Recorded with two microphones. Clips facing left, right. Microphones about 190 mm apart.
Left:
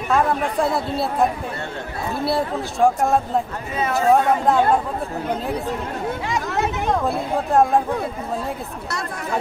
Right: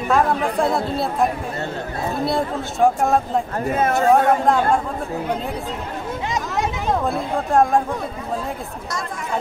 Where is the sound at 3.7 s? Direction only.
50° right (ahead or behind).